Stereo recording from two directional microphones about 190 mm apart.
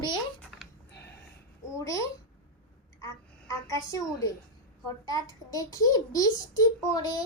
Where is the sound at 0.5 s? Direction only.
Centre (ahead or behind).